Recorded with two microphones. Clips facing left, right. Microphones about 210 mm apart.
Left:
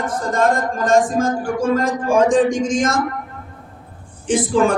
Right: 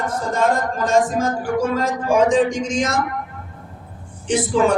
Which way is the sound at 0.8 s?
50° left (ahead or behind).